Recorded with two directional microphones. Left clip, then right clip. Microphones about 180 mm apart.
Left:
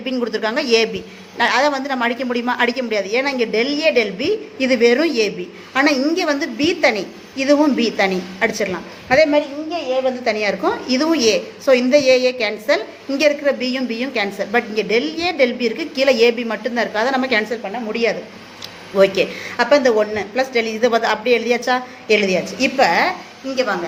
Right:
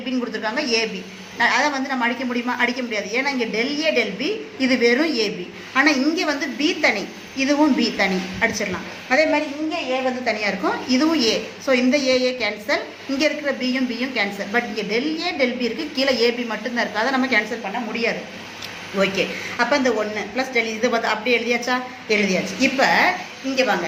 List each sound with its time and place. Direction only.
0.0 s a woman's voice: 50° left (ahead or behind)
18.9 s a woman's voice: 55° left (ahead or behind)